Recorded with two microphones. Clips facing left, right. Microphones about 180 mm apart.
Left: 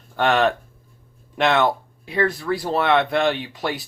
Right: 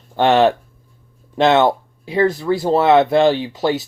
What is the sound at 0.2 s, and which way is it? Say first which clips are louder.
Speech: right 5 dB; 30° right (ahead or behind).